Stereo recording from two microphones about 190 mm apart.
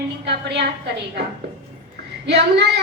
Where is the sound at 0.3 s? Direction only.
60° right (ahead or behind).